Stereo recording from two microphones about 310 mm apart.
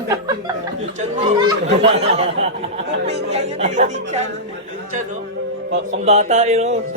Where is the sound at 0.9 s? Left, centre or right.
Centre.